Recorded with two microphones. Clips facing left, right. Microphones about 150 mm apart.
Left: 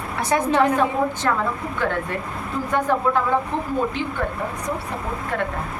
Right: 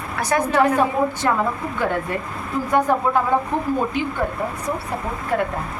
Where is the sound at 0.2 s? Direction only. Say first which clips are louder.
Right 1 dB; 25° left (ahead or behind).